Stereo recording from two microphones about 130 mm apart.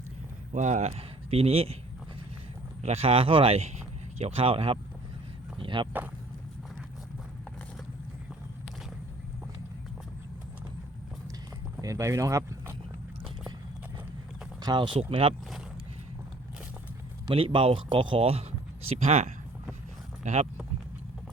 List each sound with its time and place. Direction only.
0.5 s speech: 65° right (ahead or behind); by 1.7 s 50° right (ahead or behind)
2.8 s speech: 55° right (ahead or behind)
5.5 s a sound: 40° right (ahead or behind)
11.8 s speech: 25° right (ahead or behind)
14.6 s speech: 35° right (ahead or behind)
17.2 s speech: 40° right (ahead or behind); by 20.5 s 60° right (ahead or behind)